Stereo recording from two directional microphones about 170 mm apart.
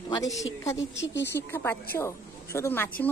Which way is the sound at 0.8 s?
90° left.